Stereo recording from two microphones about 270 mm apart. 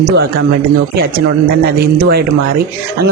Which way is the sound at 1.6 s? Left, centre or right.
Right.